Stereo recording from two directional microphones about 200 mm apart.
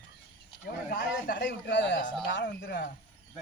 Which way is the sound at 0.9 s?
45° left (ahead or behind).